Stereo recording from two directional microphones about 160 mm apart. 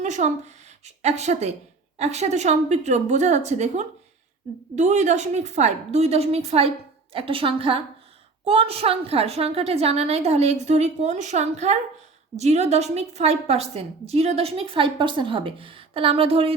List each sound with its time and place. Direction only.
0.0 s a woman's voice: 50° right (ahead or behind)